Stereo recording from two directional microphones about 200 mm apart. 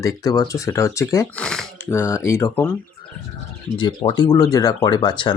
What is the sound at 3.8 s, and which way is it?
Speech, 25° left (ahead or behind).